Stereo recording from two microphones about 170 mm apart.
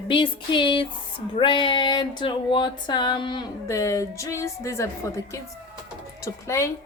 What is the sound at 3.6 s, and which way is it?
A woman's voice, 20° left (ahead or behind).